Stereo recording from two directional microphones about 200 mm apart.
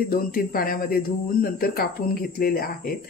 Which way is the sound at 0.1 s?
45° left (ahead or behind).